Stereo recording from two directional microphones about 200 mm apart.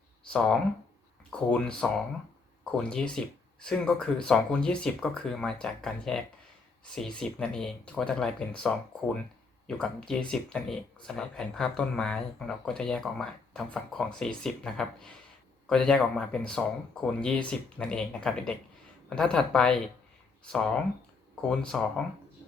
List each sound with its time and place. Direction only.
0.3 s speech: 5° left (ahead or behind)